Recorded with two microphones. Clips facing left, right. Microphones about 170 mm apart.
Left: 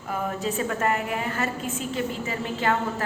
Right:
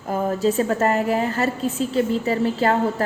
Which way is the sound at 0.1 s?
35° right (ahead or behind).